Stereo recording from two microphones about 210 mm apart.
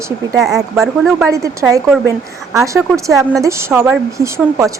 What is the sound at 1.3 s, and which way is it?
Speech, 15° right (ahead or behind).